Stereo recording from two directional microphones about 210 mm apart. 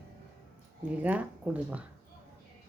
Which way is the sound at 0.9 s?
5° right (ahead or behind).